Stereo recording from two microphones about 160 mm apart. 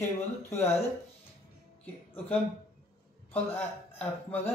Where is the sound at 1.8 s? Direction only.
10° left (ahead or behind).